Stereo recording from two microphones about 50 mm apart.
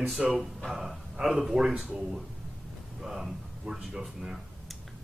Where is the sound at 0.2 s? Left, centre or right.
Centre.